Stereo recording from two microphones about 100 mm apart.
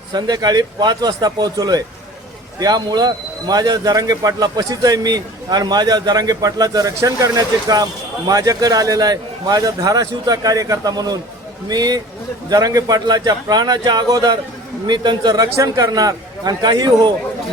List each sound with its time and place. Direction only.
0.1 s a man's voice: 45° right (ahead or behind)